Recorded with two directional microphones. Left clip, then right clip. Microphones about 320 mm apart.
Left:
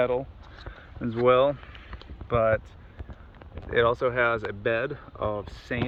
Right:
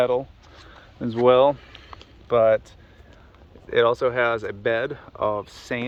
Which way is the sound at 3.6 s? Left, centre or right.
Centre.